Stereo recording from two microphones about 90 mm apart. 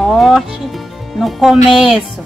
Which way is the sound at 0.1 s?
Centre (ahead or behind).